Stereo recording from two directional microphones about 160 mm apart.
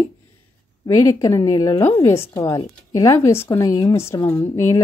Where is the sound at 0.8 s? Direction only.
20° left (ahead or behind).